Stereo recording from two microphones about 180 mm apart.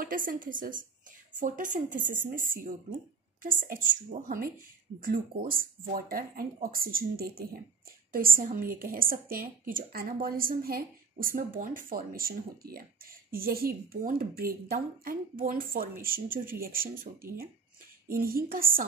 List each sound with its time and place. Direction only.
0.0 s a woman's voice: 50° right (ahead or behind)